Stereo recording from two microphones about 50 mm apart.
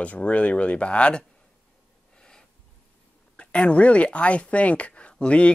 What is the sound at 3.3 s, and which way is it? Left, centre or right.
Speech, left.